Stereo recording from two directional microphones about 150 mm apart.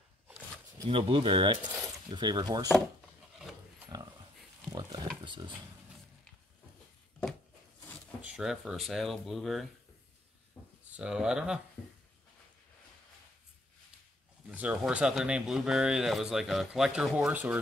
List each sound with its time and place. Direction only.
0.8 s speech: 35° right (ahead or behind)
3.9 s pig: 25° right (ahead or behind)
4.6 s pig: 5° left (ahead or behind)
5.2 s speech: 30° right (ahead or behind)
8.2 s speech: 5° right (ahead or behind)
10.6 s a sound: 10° left (ahead or behind)
10.9 s speech: 5° right (ahead or behind)
14.5 s speech: 10° right (ahead or behind)